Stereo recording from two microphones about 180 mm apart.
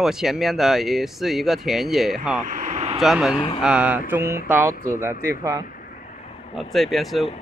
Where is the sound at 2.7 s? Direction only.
35° right (ahead or behind).